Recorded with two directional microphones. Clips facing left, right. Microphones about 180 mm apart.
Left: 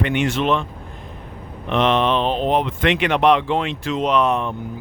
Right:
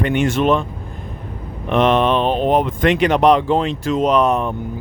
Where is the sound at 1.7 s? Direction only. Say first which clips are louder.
Right 3 dB; 50° right (ahead or behind).